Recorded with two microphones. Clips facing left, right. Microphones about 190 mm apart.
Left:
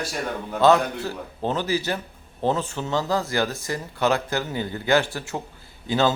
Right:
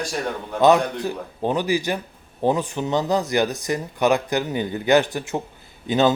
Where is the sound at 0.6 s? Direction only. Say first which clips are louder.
Right 2 dB; 15° right (ahead or behind).